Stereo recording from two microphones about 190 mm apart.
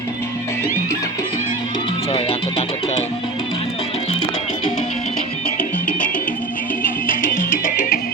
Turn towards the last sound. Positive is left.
turn(degrees=50)  # may be behind; listen again after turning